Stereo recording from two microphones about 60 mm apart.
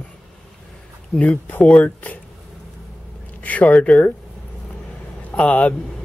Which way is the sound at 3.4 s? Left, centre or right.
Left.